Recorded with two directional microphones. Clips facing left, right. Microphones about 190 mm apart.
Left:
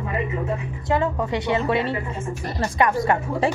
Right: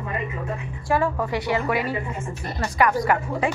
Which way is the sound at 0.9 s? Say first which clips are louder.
Even; 20° left (ahead or behind).